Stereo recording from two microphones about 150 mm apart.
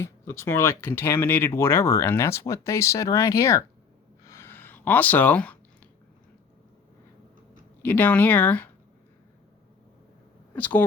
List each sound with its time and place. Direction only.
0.0 s speech: 15° left (ahead or behind)
4.3 s a sound: 15° left (ahead or behind)
7.8 s speech: 10° left (ahead or behind)
10.5 s speech: 10° left (ahead or behind)